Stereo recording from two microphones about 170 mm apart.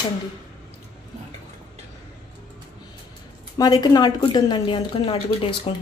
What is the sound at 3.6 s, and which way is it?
A woman's voice, 25° left (ahead or behind).